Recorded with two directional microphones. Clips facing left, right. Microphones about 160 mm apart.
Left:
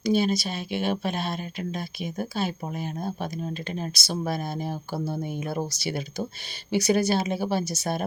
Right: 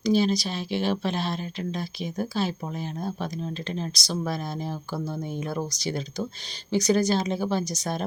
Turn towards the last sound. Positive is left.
turn(degrees=5)  # may be behind; listen again after turning